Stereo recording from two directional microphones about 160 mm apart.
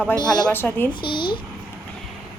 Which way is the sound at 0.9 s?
30° left (ahead or behind).